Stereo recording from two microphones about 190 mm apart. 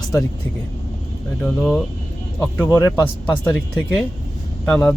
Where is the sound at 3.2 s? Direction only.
5° left (ahead or behind).